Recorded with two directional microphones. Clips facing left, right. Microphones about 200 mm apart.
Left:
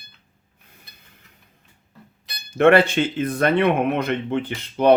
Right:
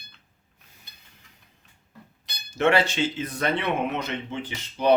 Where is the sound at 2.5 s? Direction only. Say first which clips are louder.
Left 7 dB; 55° left (ahead or behind).